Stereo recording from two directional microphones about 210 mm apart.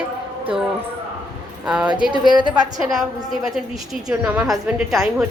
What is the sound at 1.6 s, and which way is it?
Speech, 5° right (ahead or behind).